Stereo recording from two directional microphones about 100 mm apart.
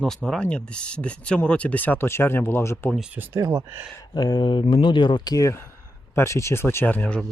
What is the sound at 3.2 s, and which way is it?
Speech, 25° right (ahead or behind).